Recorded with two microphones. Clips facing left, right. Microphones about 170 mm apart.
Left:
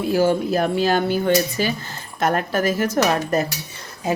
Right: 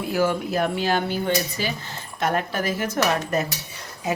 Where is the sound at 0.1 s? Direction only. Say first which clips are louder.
Left 4 dB; 30° left (ahead or behind).